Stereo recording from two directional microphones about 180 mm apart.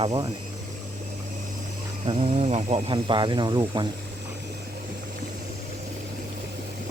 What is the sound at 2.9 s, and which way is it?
Speech, 25° right (ahead or behind).